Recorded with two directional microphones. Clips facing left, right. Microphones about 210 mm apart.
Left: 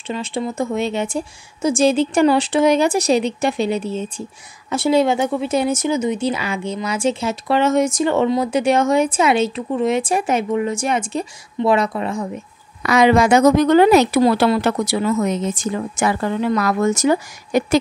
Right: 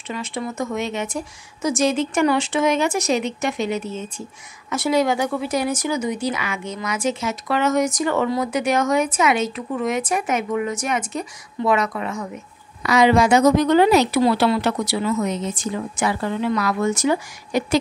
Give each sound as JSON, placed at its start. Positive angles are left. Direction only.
{"t": 0.1, "sound": "a woman's voice", "side_deg": 30}
{"t": 12.8, "sound": "speech", "side_deg": 55}